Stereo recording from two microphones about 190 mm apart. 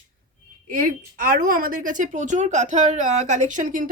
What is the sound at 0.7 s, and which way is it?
Speech, 50° right (ahead or behind).